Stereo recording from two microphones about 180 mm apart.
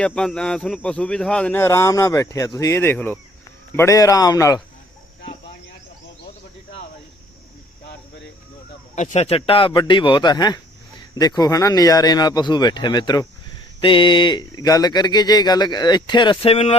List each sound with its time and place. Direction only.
0.0 s a man's voice: 5° left (ahead or behind)
9.0 s speech: 40° left (ahead or behind)